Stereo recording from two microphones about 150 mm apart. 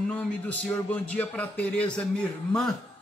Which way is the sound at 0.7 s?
10° left (ahead or behind).